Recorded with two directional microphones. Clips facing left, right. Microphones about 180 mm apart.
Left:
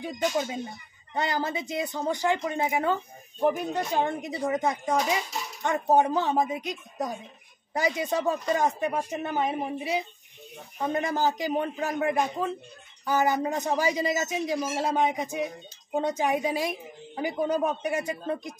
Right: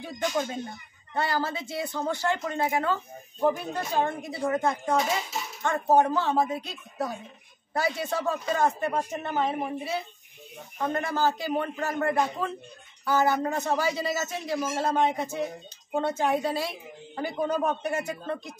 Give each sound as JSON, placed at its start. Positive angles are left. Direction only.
{"t": 0.0, "sound": "speech", "side_deg": 15}